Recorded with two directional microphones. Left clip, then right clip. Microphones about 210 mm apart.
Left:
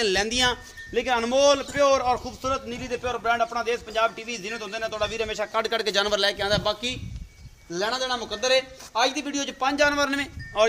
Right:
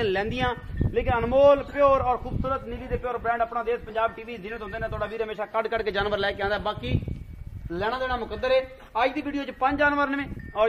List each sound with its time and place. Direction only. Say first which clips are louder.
0.0 s a man's voice: left 3 dB; 15° left (ahead or behind)